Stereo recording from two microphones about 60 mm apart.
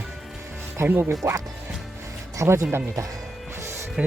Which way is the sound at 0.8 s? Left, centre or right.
Right.